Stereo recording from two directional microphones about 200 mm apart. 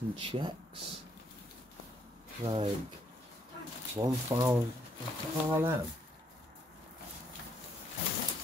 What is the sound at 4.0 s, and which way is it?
Speech, 15° right (ahead or behind).